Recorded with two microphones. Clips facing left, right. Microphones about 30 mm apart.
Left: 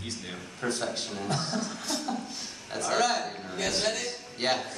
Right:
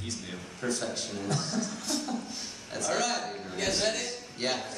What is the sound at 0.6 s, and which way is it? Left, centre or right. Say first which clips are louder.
A man's voice: left 1 dB; left.